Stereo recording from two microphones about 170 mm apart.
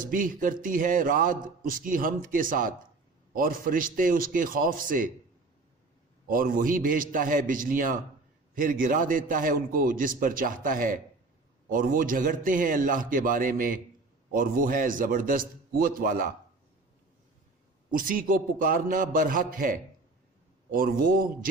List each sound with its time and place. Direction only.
0.0 s a man's voice: 55° right (ahead or behind)
6.2 s a man's voice: 55° right (ahead or behind)
17.9 s a man's voice: 55° right (ahead or behind)